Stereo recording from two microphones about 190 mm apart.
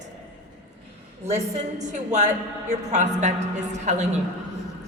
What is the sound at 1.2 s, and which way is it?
A woman's voice, 35° right (ahead or behind).